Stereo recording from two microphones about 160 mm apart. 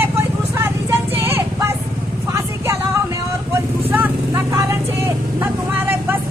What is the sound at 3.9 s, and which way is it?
Vehicle, 15° right (ahead or behind).